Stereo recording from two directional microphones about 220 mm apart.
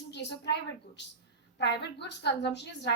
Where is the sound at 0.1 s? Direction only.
50° left (ahead or behind).